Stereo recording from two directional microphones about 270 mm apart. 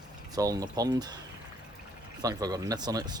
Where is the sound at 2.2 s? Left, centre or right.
Centre.